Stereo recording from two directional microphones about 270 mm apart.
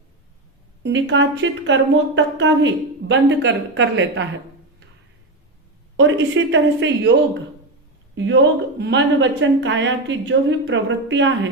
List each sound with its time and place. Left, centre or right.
0.8 s a woman's voice: right
6.0 s a woman's voice: right
8.1 s a woman's voice: right